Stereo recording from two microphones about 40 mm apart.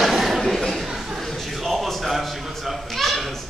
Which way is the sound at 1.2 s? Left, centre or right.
Centre.